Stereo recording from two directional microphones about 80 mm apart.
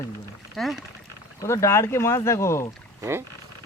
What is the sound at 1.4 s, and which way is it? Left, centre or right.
A man's voice, left.